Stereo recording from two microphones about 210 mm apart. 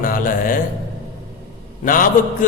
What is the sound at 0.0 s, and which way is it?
Mantra, 40° left (ahead or behind).